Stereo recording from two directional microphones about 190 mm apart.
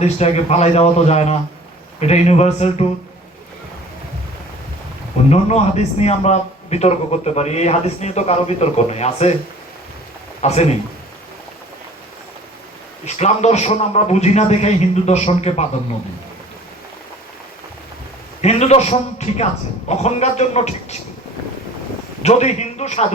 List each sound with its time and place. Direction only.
0.0 s a man's voice: 35° left (ahead or behind)
5.3 s a man's voice: 35° left (ahead or behind)
10.4 s a man's voice: 35° left (ahead or behind)
13.1 s a man's voice: 35° left (ahead or behind)
18.4 s a man's voice: 35° left (ahead or behind)
22.2 s a man's voice: 35° left (ahead or behind)